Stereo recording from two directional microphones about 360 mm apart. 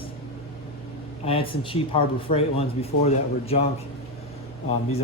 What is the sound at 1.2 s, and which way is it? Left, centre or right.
Speech, centre.